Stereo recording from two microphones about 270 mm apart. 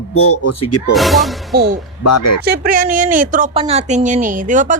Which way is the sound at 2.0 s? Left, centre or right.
Left.